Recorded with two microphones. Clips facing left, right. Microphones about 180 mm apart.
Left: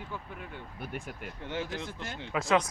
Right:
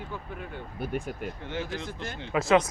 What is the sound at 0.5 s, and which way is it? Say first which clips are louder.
Speech: right 9 dB; 35° right (ahead or behind).